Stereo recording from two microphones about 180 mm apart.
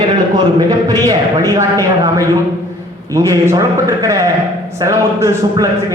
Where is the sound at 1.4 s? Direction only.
20° right (ahead or behind).